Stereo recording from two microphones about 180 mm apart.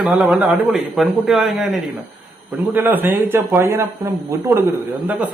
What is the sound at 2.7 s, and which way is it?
A man's voice, 10° right (ahead or behind).